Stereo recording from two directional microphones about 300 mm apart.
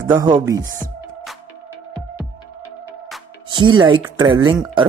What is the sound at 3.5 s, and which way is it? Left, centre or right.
Speech, centre.